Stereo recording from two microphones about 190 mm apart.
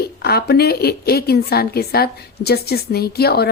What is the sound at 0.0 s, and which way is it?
A woman's voice, 55° left (ahead or behind).